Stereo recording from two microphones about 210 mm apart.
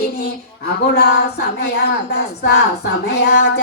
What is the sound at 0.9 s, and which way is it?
Child singing, 50° left (ahead or behind).